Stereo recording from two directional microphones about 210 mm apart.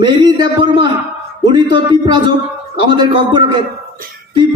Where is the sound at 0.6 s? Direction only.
20° right (ahead or behind).